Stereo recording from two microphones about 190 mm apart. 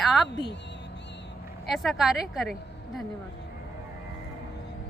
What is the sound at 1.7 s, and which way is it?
Speech, centre (ahead or behind).